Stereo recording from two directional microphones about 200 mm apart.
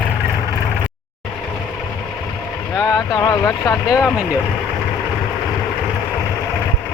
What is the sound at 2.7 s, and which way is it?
Speech, 15° left (ahead or behind).